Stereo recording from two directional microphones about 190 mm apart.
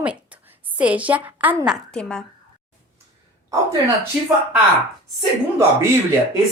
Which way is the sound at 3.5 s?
15° right (ahead or behind).